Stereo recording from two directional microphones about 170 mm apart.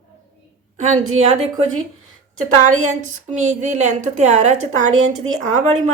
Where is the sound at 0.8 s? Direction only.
40° right (ahead or behind).